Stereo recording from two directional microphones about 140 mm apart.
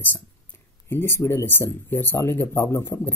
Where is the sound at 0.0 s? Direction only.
15° left (ahead or behind).